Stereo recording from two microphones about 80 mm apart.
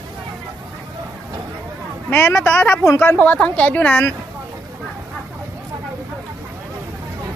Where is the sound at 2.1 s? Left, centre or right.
Left.